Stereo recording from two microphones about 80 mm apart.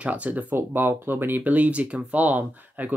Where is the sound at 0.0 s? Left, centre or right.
Centre.